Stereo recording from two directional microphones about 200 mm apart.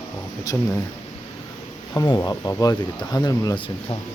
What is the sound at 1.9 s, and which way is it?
Speech, 20° left (ahead or behind).